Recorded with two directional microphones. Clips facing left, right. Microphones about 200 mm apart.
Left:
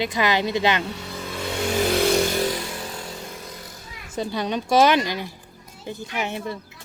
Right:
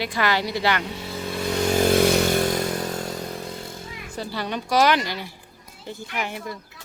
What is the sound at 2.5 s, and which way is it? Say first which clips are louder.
Chainsaw: right 6 dB; 45° right (ahead or behind).